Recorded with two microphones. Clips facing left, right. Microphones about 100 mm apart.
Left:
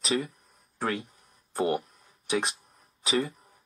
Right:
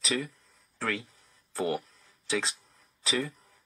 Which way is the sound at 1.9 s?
15° left (ahead or behind).